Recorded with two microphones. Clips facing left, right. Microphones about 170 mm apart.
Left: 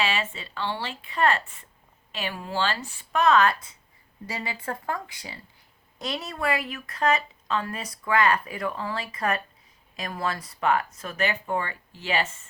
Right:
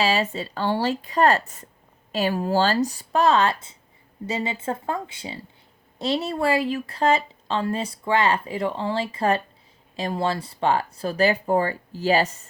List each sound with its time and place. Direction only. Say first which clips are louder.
0.0 s speech: right 6 dB; 35° right (ahead or behind)